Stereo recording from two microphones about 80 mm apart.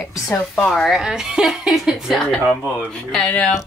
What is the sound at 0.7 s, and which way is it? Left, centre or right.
Speech, centre.